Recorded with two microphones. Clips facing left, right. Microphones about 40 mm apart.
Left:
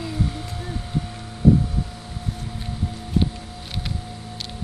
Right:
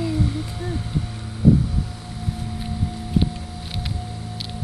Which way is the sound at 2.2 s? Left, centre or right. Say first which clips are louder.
Right 3 dB; centre.